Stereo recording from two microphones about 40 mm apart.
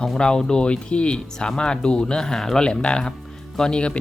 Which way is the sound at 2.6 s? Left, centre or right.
Left.